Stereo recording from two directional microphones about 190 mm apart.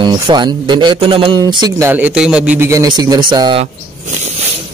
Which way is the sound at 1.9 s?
10° right (ahead or behind).